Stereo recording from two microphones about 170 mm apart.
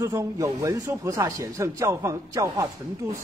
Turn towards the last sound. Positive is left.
turn(degrees=-20)  # may be behind; listen again after turning